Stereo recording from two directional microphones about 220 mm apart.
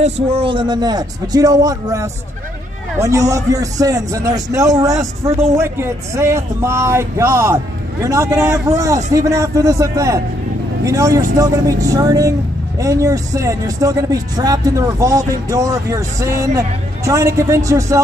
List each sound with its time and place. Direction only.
0.0 s speech: 25° right (ahead or behind)